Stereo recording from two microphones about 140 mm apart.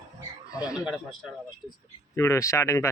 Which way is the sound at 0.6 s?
5° right (ahead or behind).